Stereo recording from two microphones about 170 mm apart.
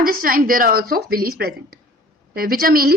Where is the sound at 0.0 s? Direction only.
55° right (ahead or behind).